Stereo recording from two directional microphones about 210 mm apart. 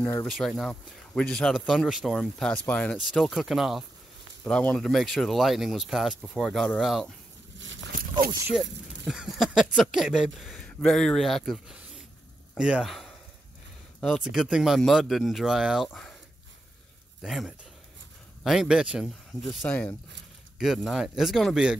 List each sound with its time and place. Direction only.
0.0 s speech: 10° left (ahead or behind)
7.5 s a sound: 65° right (ahead or behind)
9.0 s speech: centre (ahead or behind)
17.2 s speech: centre (ahead or behind)